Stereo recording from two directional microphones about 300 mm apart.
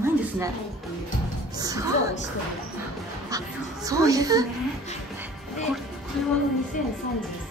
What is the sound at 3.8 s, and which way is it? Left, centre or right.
Music, centre.